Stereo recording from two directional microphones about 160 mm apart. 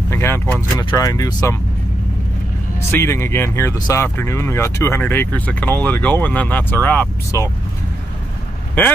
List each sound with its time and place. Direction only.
0.1 s speech: 15° left (ahead or behind)
2.9 s speech: 15° left (ahead or behind)